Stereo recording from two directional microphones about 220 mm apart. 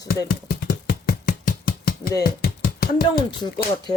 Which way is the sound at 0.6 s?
40° left (ahead or behind).